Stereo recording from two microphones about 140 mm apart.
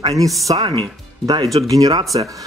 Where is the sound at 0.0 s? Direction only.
25° right (ahead or behind).